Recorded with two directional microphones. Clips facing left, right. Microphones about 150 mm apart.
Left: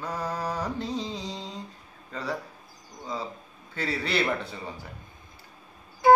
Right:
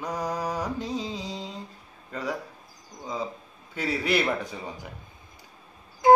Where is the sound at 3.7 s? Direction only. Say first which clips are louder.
Right 2 dB; 10° right (ahead or behind).